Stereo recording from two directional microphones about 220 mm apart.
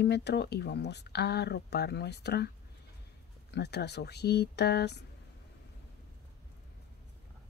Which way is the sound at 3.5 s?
50° left (ahead or behind).